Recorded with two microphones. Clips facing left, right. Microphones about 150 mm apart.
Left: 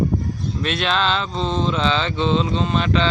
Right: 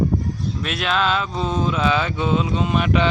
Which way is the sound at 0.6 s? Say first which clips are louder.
Left 1 dB; 5° right (ahead or behind).